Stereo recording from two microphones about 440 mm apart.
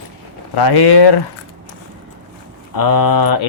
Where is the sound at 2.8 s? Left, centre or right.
Left.